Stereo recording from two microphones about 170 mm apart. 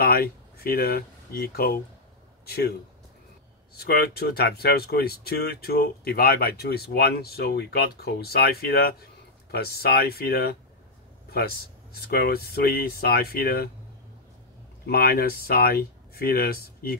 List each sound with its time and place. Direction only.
0.0 s speech: 65° left (ahead or behind)
3.7 s a man's voice: 65° left (ahead or behind)
14.9 s speech: 65° left (ahead or behind)